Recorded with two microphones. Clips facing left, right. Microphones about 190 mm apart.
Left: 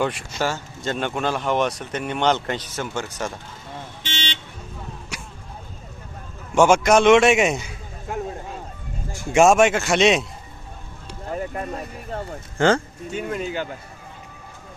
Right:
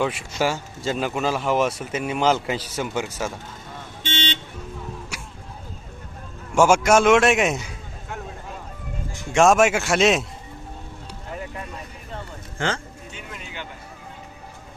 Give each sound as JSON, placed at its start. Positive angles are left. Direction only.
{"t": 0.0, "sound": "speech", "side_deg": 0}
{"t": 5.1, "sound": "a sound", "side_deg": -5}
{"t": 6.6, "sound": "speech", "side_deg": -5}
{"t": 9.3, "sound": "speech", "side_deg": 0}
{"t": 11.3, "sound": "music", "side_deg": 45}